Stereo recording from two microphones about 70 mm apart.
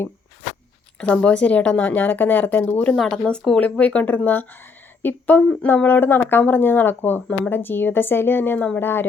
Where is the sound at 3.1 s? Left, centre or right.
Centre.